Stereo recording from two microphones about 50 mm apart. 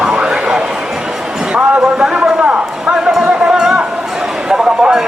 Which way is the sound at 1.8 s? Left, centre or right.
Centre.